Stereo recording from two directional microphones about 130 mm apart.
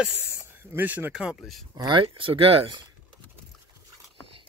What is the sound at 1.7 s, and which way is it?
Speech, 35° right (ahead or behind).